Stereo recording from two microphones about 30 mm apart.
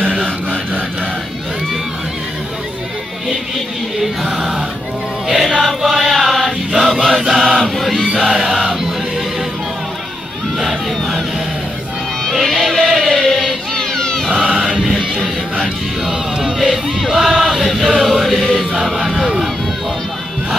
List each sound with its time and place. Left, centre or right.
4.3 s a sound: centre
5.6 s choir: centre
5.9 s chant: centre
8.2 s a sound: centre
12.3 s music: centre
13.1 s chant: centre
13.7 s cat: centre
14.4 s music: right
16.5 s music: centre
17.6 s choir: centre
18.4 s chant: centre